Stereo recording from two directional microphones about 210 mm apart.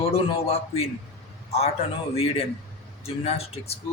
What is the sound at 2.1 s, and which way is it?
A man's voice, 30° left (ahead or behind).